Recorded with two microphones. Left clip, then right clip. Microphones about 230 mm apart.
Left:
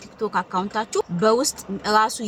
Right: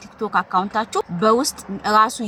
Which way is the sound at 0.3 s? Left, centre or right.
Centre.